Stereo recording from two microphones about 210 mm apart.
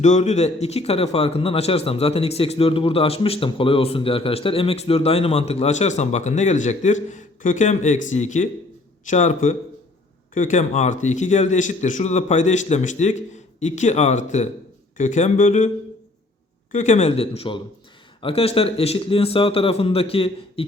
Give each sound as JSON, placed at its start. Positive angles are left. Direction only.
{"t": 0.0, "sound": "a man's voice", "side_deg": 35}
{"t": 16.7, "sound": "speech", "side_deg": 35}